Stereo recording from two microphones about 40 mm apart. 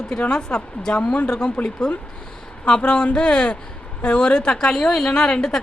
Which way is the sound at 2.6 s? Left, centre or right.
Left.